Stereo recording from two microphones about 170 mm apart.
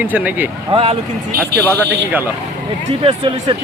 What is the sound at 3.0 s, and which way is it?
Speech, 30° right (ahead or behind).